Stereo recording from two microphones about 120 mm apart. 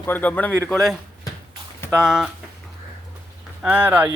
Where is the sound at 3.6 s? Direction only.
15° right (ahead or behind).